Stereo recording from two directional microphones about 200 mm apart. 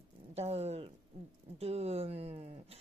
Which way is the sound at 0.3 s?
30° right (ahead or behind).